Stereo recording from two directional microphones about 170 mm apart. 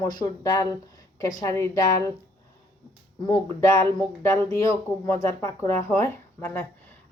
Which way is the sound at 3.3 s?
15° left (ahead or behind).